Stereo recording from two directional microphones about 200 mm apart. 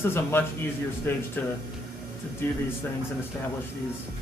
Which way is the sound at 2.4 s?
10° left (ahead or behind).